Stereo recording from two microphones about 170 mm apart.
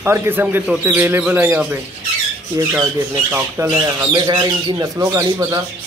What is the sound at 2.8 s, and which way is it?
Speech, 15° right (ahead or behind).